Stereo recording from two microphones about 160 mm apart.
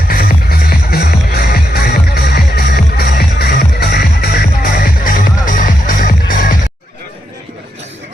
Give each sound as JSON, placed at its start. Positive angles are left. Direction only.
{"t": 0.1, "sound": "music", "side_deg": 65}